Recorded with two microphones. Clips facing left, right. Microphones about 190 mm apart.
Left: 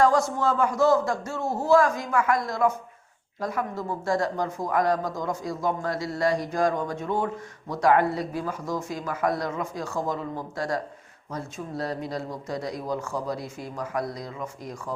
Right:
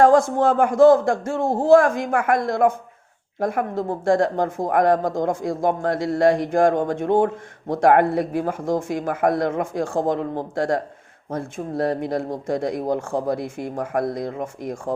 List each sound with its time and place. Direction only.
0.0 s speech: 50° right (ahead or behind)